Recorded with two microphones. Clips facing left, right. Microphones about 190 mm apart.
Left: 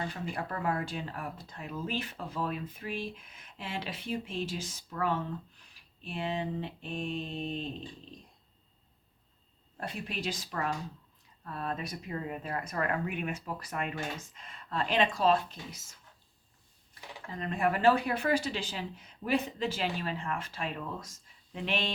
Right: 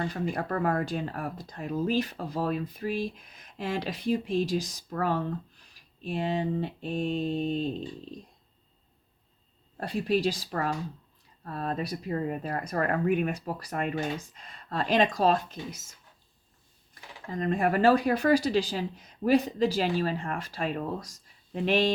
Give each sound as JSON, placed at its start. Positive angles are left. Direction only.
{"t": 0.1, "sound": "speech", "side_deg": -45}
{"t": 5.6, "sound": "a sound", "side_deg": -40}
{"t": 9.8, "sound": "speech", "side_deg": -35}
{"t": 16.9, "sound": "speech", "side_deg": -40}